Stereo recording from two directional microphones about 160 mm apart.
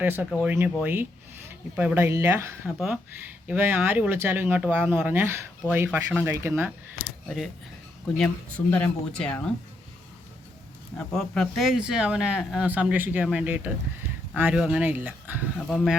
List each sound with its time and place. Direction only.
0.0 s speech: 10° right (ahead or behind)
2.6 s speech: 5° right (ahead or behind)
8.2 s speech: 10° left (ahead or behind)
10.9 s speech: centre (ahead or behind)
15.5 s speech: centre (ahead or behind)